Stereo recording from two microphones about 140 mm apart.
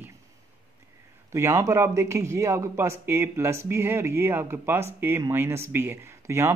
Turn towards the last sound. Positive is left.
turn(degrees=-20)  # may be behind; listen again after turning